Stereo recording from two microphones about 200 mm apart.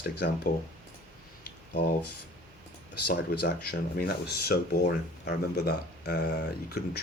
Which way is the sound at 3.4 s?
50° left (ahead or behind).